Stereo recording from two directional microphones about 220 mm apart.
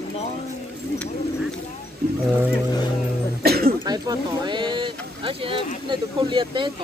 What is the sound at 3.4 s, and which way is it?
Throat clearing, 45° right (ahead or behind).